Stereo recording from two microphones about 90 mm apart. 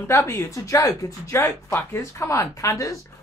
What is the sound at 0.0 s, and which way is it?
Speech, 20° left (ahead or behind).